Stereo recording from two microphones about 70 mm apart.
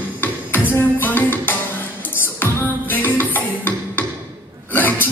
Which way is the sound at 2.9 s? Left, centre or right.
Left.